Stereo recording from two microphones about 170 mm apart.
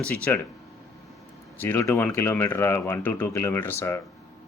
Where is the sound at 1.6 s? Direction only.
10° left (ahead or behind).